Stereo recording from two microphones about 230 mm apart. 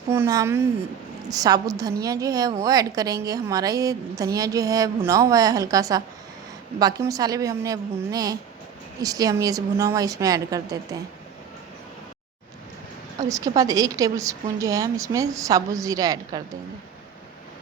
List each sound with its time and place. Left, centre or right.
0.1 s a woman's voice: centre
13.1 s a woman's voice: centre